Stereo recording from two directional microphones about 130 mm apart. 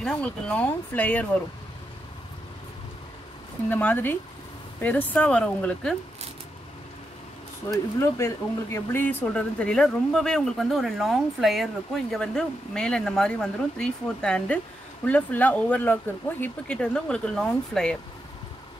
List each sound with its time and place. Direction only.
0.0 s speech: 5° left (ahead or behind)
3.7 s speech: 15° left (ahead or behind)
7.7 s speech: 25° left (ahead or behind); by 17.9 s 5° left (ahead or behind)